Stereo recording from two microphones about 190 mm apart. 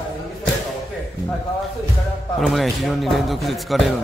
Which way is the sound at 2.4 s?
Centre (ahead or behind).